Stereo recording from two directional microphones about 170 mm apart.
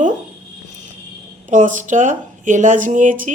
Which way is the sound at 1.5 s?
50° right (ahead or behind).